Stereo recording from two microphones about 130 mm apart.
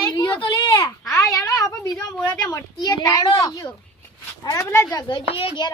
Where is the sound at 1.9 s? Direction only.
10° left (ahead or behind).